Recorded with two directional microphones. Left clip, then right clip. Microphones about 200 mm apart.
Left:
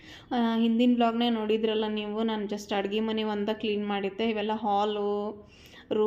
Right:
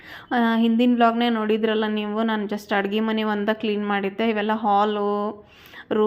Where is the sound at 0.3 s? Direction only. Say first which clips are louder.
Right 7 dB; 15° right (ahead or behind).